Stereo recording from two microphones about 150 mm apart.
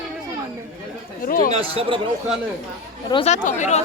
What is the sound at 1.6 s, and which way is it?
Speech, 35° right (ahead or behind).